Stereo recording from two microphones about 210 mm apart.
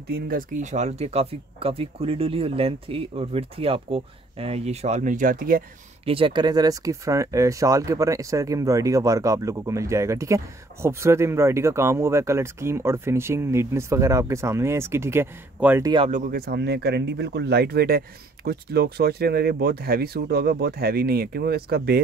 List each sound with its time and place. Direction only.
0.1 s speech: 40° right (ahead or behind)
6.0 s speech: 25° right (ahead or behind)
16.1 s speech: 40° right (ahead or behind)